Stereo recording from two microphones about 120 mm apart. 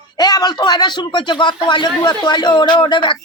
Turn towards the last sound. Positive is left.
turn(degrees=40)  # may be behind; listen again after turning